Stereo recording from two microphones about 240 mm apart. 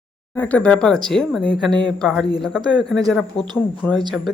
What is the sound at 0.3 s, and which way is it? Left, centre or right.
Speech, centre.